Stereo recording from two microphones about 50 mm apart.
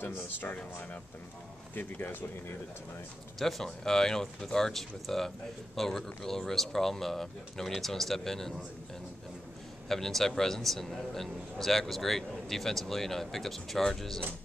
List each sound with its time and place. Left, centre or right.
0.1 s speech: left
1.8 s speech: left
3.3 s speech: centre
9.8 s a man's voice: centre